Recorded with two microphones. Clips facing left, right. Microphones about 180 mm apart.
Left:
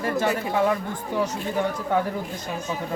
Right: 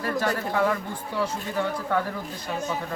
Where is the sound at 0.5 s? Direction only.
20° left (ahead or behind).